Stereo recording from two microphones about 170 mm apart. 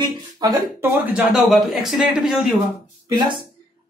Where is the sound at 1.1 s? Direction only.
Centre (ahead or behind).